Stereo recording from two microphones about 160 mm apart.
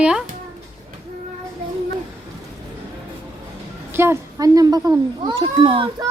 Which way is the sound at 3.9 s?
15° right (ahead or behind).